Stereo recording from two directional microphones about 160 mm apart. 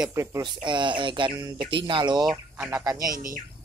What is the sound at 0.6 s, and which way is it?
Speech, 30° right (ahead or behind).